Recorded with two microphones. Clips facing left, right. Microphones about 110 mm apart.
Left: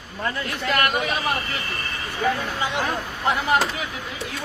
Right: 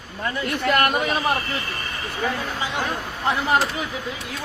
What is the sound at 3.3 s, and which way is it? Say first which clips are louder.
Speech: even; 30° right (ahead or behind).